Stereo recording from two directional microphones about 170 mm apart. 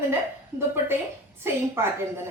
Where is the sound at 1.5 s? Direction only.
15° right (ahead or behind).